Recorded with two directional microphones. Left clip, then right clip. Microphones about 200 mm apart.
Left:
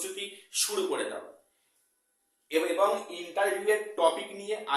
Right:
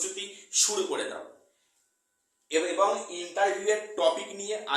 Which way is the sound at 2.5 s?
10° right (ahead or behind).